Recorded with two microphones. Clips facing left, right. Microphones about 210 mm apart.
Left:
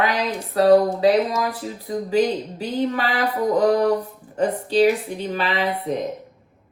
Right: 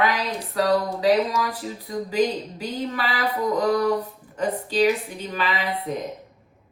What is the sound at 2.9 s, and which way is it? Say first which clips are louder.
Speech: left 3 dB; 40° left (ahead or behind).